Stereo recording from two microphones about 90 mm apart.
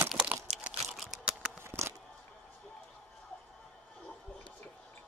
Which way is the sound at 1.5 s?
30° right (ahead or behind).